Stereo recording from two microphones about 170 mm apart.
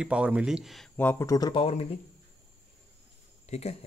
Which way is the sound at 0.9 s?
15° left (ahead or behind).